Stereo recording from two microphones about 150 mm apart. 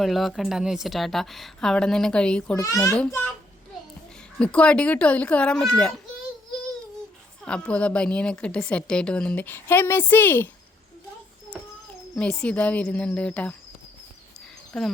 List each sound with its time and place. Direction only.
0.0 s a woman's voice: centre (ahead or behind)
2.6 s a child's voice: 20° left (ahead or behind)
4.4 s a woman's voice: 5° left (ahead or behind)
7.4 s a woman's voice: 5° left (ahead or behind)
12.1 s a woman's voice: 5° left (ahead or behind)
14.7 s speech: centre (ahead or behind)